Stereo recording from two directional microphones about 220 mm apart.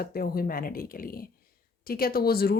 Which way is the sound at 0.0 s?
45° left (ahead or behind).